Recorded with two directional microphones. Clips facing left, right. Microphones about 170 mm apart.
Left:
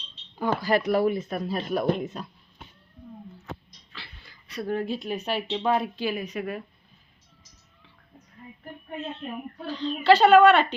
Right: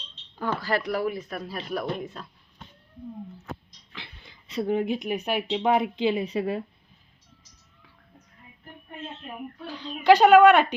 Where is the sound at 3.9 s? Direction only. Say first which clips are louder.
Right 2 dB; 20° right (ahead or behind).